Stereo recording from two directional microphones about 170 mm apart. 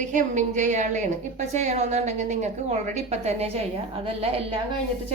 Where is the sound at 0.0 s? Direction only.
45° right (ahead or behind).